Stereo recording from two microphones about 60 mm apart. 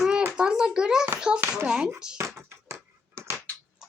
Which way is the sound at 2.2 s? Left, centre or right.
Right.